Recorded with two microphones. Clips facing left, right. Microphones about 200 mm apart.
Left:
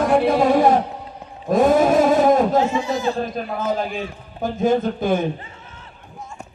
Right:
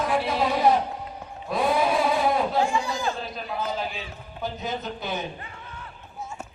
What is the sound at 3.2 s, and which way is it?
A man's voice, 50° left (ahead or behind).